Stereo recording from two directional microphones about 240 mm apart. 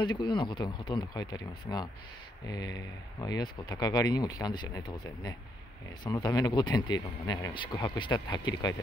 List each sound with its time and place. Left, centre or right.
0.0 s speech: centre